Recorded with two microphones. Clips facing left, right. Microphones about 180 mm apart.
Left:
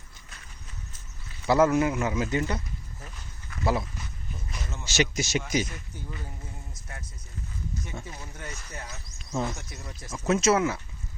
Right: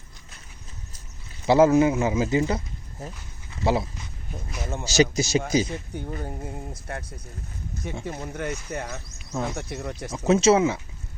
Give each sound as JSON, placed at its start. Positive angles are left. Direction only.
{"t": 1.5, "sound": "a man's voice", "side_deg": -25}
{"t": 3.5, "sound": "a sound", "side_deg": -25}
{"t": 4.8, "sound": "speech", "side_deg": -35}
{"t": 6.2, "sound": "speech", "side_deg": -60}
{"t": 8.0, "sound": "speech", "side_deg": -60}
{"t": 10.1, "sound": "a man's voice", "side_deg": -30}